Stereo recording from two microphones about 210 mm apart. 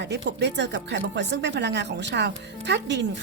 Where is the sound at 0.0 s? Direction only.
55° right (ahead or behind).